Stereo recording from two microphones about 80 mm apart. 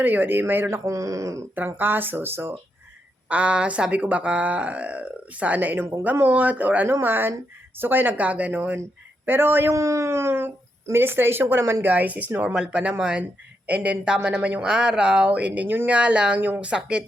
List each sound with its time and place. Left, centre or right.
0.0 s speech: right
0.9 s speech: right
1.5 s speech: right
3.2 s speech: centre
9.7 s speech: right
11.9 s speech: centre